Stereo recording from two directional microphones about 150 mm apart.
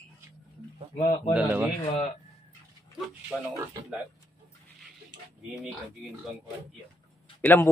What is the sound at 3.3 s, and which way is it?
Speech, 10° left (ahead or behind).